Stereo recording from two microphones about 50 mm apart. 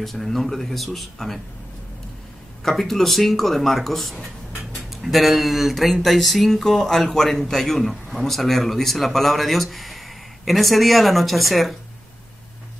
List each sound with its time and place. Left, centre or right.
0.0 s speech: centre
2.6 s speech: centre